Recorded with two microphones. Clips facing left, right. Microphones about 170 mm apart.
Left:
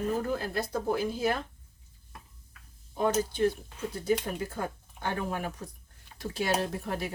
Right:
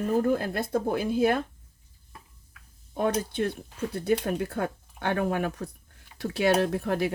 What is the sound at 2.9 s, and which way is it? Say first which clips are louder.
Speech: right 1 dB; 60° right (ahead or behind).